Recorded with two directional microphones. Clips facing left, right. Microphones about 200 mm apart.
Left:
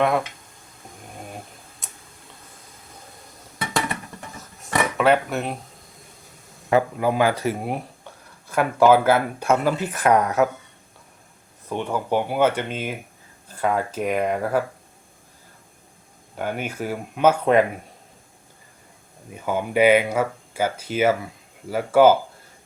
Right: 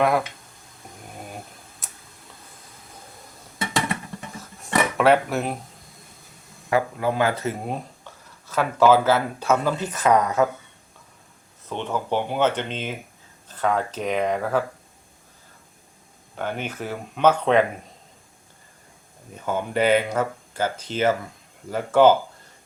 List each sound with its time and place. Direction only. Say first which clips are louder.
1.8 s tick-tock: left 1 dB; centre (ahead or behind)
4.6 s a sound: right 1 dB; centre (ahead or behind)
6.7 s speech: left 3 dB; 20° left (ahead or behind)
11.7 s speech: left 2 dB; 10° left (ahead or behind)
16.4 s speech: left 2 dB; 10° left (ahead or behind)
19.3 s speech: left 2 dB; 10° left (ahead or behind)